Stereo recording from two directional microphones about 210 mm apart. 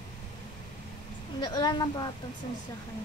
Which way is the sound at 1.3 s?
20° left (ahead or behind).